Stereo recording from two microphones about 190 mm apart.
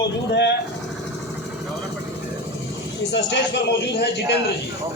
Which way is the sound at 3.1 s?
65° left (ahead or behind).